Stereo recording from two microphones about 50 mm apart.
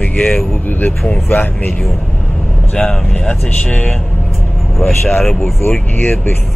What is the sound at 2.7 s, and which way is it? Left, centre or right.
Speech, left.